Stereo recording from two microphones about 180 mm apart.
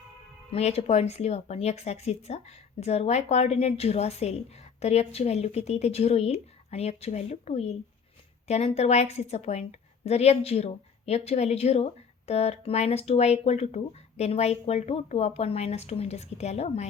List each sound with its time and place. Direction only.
0.5 s a woman's voice: 35° left (ahead or behind)